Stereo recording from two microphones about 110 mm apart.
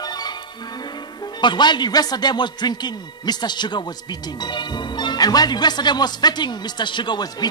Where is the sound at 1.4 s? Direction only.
45° left (ahead or behind).